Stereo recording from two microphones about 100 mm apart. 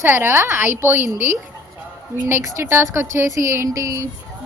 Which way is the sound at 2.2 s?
25° right (ahead or behind).